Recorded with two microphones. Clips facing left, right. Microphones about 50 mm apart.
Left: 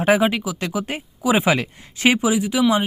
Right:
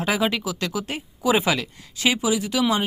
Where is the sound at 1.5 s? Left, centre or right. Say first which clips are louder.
Left 4 dB; left.